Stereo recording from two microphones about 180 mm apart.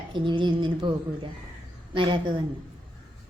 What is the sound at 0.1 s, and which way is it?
A woman's voice, 25° right (ahead or behind).